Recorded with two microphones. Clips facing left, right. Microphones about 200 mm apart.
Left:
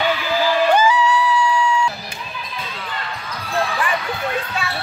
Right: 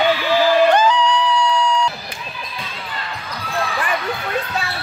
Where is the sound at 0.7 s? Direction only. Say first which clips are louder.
Right 1 dB; 10° left (ahead or behind).